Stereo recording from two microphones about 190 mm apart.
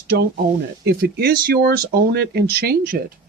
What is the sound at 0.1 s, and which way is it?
Speech, 60° right (ahead or behind).